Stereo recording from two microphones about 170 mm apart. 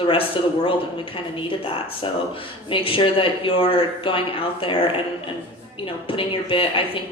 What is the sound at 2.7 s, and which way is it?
A woman's voice, 30° left (ahead or behind).